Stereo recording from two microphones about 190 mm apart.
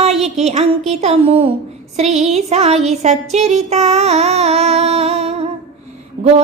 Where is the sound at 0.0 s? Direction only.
35° right (ahead or behind).